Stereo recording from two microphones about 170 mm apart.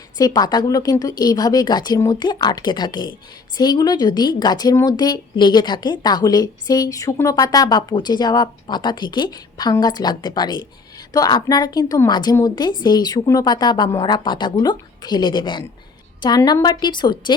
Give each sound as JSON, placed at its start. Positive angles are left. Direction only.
{"t": 0.2, "sound": "a woman's voice", "side_deg": 25}